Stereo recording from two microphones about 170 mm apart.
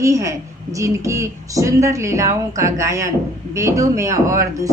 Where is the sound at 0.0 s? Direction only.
20° right (ahead or behind).